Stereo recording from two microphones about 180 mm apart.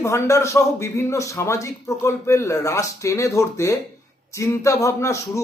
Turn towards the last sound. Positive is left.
turn(degrees=15)  # may be behind; listen again after turning